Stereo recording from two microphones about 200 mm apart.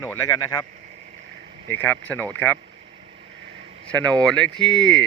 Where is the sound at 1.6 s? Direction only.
10° left (ahead or behind).